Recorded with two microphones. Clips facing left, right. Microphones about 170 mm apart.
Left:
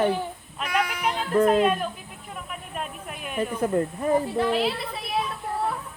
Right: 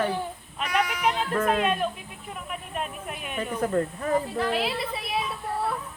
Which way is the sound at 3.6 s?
20° left (ahead or behind).